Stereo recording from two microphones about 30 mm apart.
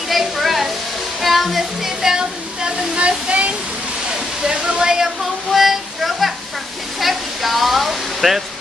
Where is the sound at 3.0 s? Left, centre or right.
Right.